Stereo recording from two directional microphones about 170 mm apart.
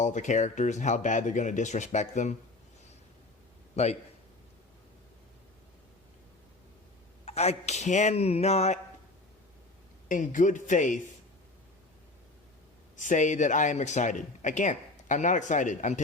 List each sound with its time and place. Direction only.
0.0 s speech: 45° left (ahead or behind)
3.8 s speech: 40° left (ahead or behind)
7.3 s speech: 40° left (ahead or behind)
10.1 s speech: 50° left (ahead or behind)
13.0 s speech: 45° left (ahead or behind)